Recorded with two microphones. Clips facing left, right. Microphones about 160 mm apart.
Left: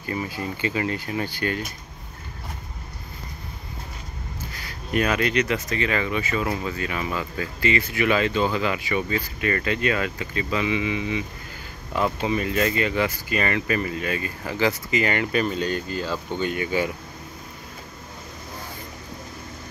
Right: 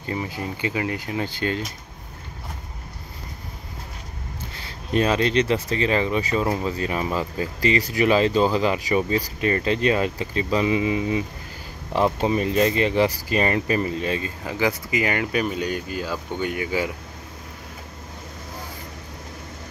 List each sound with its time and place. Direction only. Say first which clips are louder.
0.0 s speech: even; 20° right (ahead or behind)
4.6 s speech: right 2 dB; 30° right (ahead or behind); by 16.9 s 15° right (ahead or behind)